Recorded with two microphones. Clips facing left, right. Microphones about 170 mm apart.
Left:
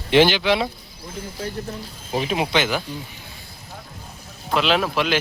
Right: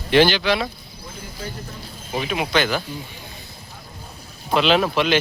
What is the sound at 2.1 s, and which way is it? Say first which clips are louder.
Speech: even; 30° left (ahead or behind).